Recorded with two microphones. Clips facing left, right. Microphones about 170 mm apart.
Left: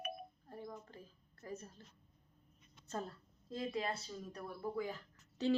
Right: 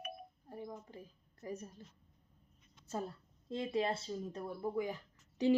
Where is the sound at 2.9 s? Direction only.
10° right (ahead or behind).